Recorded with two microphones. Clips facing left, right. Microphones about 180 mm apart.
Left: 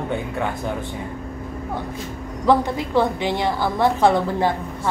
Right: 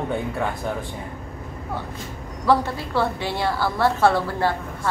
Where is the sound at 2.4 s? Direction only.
15° left (ahead or behind).